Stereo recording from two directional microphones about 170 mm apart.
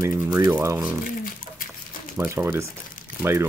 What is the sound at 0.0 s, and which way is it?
Speech, 15° right (ahead or behind).